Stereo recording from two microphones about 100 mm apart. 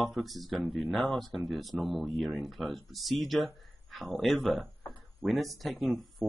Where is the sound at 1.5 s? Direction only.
Centre (ahead or behind).